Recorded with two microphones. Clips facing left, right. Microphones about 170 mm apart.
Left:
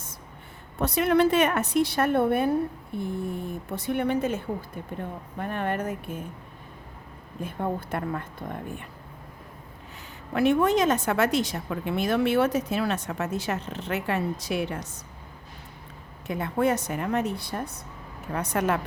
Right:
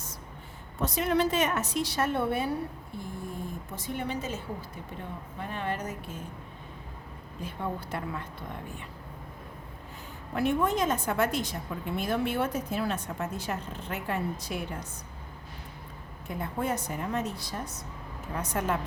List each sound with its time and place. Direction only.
0.8 s a woman's voice: 65° left (ahead or behind)
3.0 s a woman's voice: 65° left (ahead or behind)
7.4 s a woman's voice: 55° left (ahead or behind)
10.3 s a woman's voice: 80° left
16.2 s a woman's voice: 80° left